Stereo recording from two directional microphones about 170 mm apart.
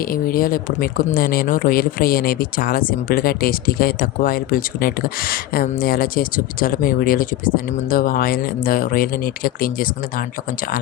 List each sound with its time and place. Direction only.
0.0 s speech: 60° left (ahead or behind)